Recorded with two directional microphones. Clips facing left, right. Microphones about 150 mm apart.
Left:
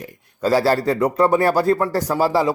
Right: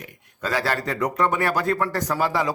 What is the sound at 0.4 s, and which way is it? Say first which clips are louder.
Speech: left 8 dB; 35° left (ahead or behind).